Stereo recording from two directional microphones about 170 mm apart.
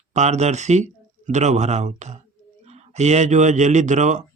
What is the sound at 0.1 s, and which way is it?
Speech, 40° right (ahead or behind).